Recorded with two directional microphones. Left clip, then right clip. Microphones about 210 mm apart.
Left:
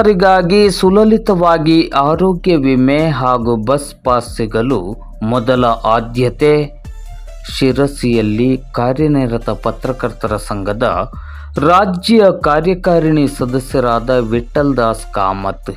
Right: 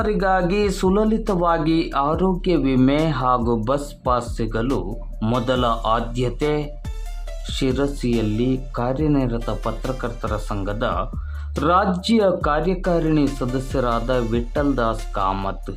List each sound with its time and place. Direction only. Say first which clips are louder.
0.0 s speech: left 10 dB; 35° left (ahead or behind)